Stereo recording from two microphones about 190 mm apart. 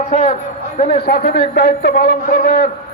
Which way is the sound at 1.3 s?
60° left (ahead or behind).